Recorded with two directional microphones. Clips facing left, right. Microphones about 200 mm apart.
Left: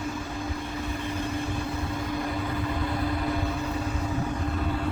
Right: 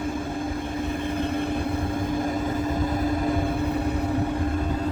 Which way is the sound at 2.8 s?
45° right (ahead or behind).